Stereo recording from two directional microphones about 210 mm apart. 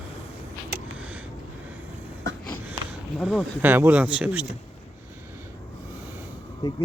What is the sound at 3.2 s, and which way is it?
Speech, centre (ahead or behind).